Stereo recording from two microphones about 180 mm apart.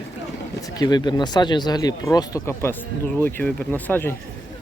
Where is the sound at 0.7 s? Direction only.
25° left (ahead or behind).